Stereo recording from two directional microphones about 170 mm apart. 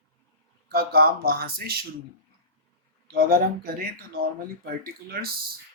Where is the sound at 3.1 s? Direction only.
60° right (ahead or behind).